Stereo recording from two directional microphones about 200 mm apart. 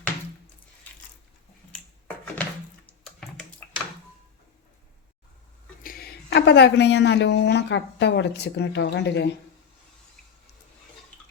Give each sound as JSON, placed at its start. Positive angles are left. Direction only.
{"t": 2.8, "sound": "typing", "side_deg": 5}
{"t": 5.8, "sound": "a woman's voice", "side_deg": 50}